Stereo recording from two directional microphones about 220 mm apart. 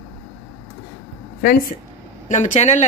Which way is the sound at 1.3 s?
45° left (ahead or behind).